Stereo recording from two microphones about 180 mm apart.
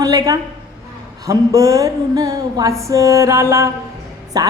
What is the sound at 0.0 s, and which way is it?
Speech, 20° right (ahead or behind).